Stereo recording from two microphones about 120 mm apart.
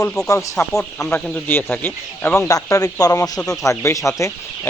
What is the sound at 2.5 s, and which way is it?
Speech, 30° left (ahead or behind).